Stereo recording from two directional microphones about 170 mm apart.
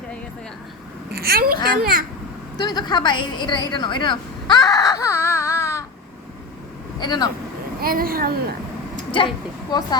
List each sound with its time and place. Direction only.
1.1 s a woman's voice: 65° right (ahead or behind)
2.6 s a woman's voice: 25° left (ahead or behind)
7.0 s speech: 25° left (ahead or behind)
7.8 s speech: 60° right (ahead or behind)
9.7 s speech: 25° left (ahead or behind)